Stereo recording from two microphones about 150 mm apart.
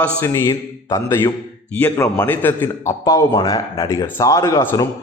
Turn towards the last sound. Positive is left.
turn(degrees=20)  # may be behind; listen again after turning